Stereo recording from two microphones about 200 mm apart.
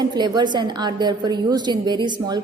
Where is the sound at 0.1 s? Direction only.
20° right (ahead or behind).